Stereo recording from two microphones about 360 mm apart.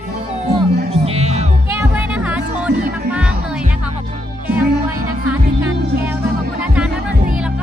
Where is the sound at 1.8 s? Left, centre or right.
Centre.